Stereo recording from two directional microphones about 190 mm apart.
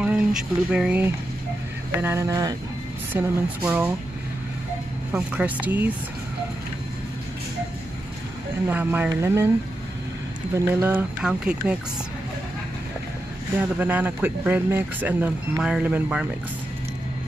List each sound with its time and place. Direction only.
0.0 s speech: 5° right (ahead or behind)
5.1 s speech: 5° right (ahead or behind)
8.6 s speech: 10° right (ahead or behind)
10.5 s speech: 10° right (ahead or behind)
13.6 s speech: 10° right (ahead or behind)